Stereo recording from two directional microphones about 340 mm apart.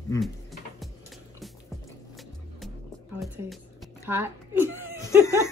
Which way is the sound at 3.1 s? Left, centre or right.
Centre.